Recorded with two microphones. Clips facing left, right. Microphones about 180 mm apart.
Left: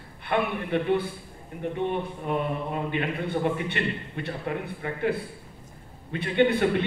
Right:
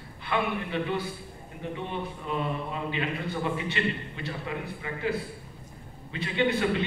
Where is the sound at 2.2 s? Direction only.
55° left (ahead or behind).